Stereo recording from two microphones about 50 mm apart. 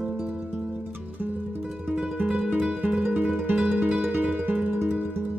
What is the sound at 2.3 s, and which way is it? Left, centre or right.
Music, centre.